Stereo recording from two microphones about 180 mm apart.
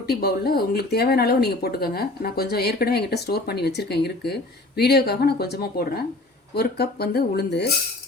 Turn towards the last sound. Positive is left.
turn(degrees=65)  # may be behind; listen again after turning